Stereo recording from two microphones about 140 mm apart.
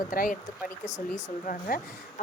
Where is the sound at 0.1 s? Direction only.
85° left.